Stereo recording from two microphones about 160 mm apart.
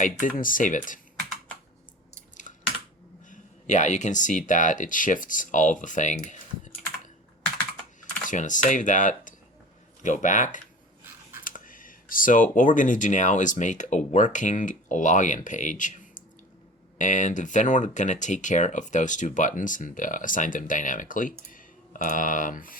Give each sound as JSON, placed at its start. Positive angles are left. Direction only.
{"t": 0.0, "sound": "speech", "side_deg": 55}
{"t": 2.3, "sound": "typing", "side_deg": 50}
{"t": 3.2, "sound": "speech", "side_deg": 50}
{"t": 8.3, "sound": "speech", "side_deg": 50}